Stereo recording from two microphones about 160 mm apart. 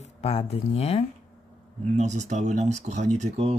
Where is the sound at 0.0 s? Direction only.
40° left (ahead or behind).